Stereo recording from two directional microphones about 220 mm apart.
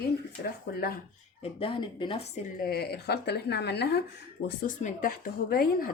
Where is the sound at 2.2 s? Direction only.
45° left (ahead or behind).